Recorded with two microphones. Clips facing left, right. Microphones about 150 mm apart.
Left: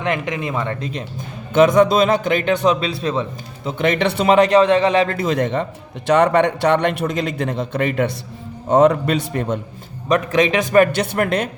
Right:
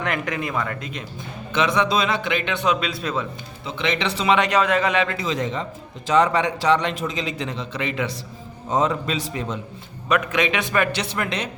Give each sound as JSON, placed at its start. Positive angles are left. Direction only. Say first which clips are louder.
{"t": 0.0, "sound": "speech", "louder": "left 3 dB", "side_deg": 20}
{"t": 1.5, "sound": "a man's voice", "louder": "left 8 dB", "side_deg": 45}
{"t": 3.7, "sound": "a man's voice", "louder": "left 6 dB", "side_deg": 50}
{"t": 4.4, "sound": "a man's voice", "louder": "left 7 dB", "side_deg": 35}
{"t": 5.1, "sound": "a man's voice", "louder": "left 6 dB", "side_deg": 55}
{"t": 8.7, "sound": "a man's voice", "louder": "left 8 dB", "side_deg": 65}
{"t": 10.1, "sound": "a man's voice", "louder": "left 5 dB", "side_deg": 35}